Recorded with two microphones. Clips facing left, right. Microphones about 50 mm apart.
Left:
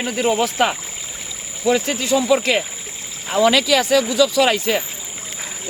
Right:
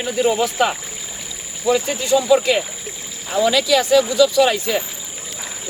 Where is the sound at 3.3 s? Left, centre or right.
Left.